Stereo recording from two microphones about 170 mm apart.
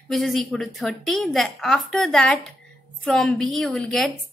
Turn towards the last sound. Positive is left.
turn(degrees=5)  # may be behind; listen again after turning